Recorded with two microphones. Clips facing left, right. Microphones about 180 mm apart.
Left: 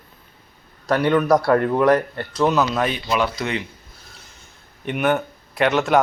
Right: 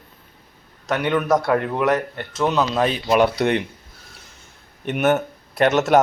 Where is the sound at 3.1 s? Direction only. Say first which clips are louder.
Right 5 dB; 55° right (ahead or behind).